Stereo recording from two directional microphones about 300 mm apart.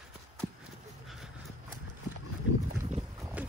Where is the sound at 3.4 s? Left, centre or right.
Centre.